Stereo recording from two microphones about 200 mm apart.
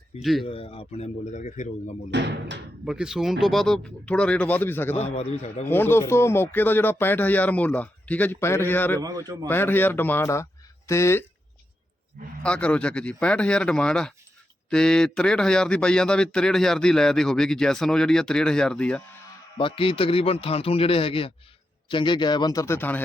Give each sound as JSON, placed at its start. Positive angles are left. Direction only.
{"t": 0.2, "sound": "a man's voice", "side_deg": 0}
{"t": 0.4, "sound": "a man's voice", "side_deg": 30}
{"t": 2.0, "sound": "speech", "side_deg": -60}
{"t": 2.8, "sound": "a man's voice", "side_deg": -5}
{"t": 4.9, "sound": "a man's voice", "side_deg": 30}
{"t": 5.6, "sound": "speech", "side_deg": 10}
{"t": 9.0, "sound": "a man's voice", "side_deg": -15}
{"t": 9.5, "sound": "speech", "side_deg": 10}
{"t": 12.4, "sound": "a man's voice", "side_deg": 5}
{"t": 19.5, "sound": "a man's voice", "side_deg": 25}